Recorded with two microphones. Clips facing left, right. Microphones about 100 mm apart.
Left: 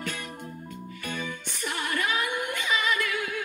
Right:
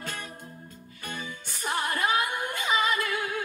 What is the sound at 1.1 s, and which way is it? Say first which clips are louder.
Music: left 2 dB; 35° right (ahead or behind).